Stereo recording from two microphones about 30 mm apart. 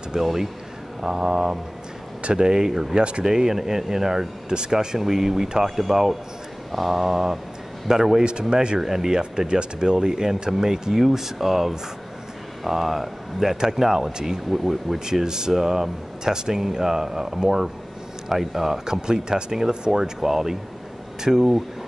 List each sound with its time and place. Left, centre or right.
0.2 s speech: centre
3.0 s speech: right
3.3 s speech: centre
4.5 s speech: right
8.2 s speech: right
8.7 s speech: centre
9.5 s speech: right; by 15.0 s centre
15.2 s speech: right
15.5 s speech: centre
16.3 s speech: right; by 18.8 s centre
18.9 s speech: right
20.0 s speech: centre